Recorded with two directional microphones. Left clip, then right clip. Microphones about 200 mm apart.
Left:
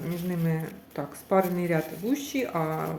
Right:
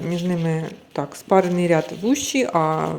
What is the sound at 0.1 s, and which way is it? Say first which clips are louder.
Speech: right 8 dB; 45° right (ahead or behind).